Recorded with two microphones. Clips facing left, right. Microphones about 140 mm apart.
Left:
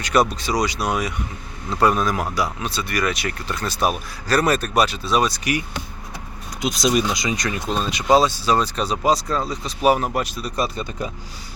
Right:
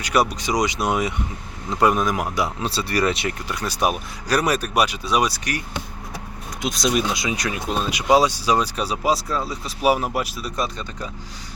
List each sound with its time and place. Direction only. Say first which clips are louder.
0.0 s speech: left 1 dB; 10° right (ahead or behind)
6.6 s speech: left 2 dB; centre (ahead or behind)